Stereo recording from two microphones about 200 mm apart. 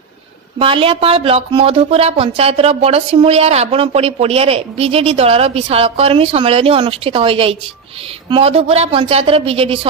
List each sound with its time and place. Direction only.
0.6 s speech: 25° right (ahead or behind)